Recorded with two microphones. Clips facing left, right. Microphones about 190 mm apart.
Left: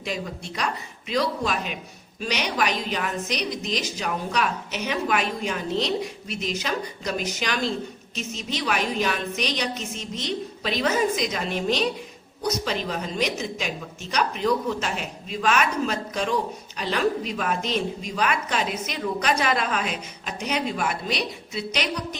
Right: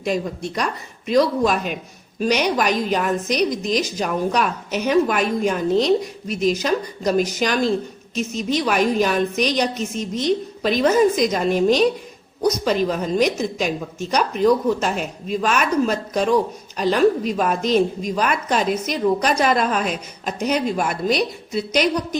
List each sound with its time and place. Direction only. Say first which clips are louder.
0.0 s a woman's voice: right 8 dB; 45° right (ahead or behind)